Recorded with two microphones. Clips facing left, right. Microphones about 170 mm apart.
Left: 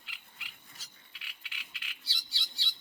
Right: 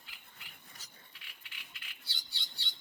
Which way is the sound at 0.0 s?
90° left.